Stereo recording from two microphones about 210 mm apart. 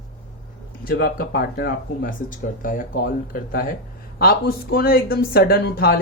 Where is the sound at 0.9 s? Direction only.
45° left (ahead or behind).